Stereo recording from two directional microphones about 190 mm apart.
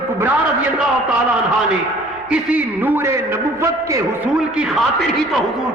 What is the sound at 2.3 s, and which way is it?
A man's voice, 5° right (ahead or behind).